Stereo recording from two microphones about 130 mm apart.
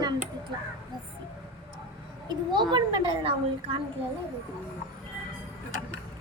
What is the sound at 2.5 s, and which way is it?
A child's voice, 35° right (ahead or behind).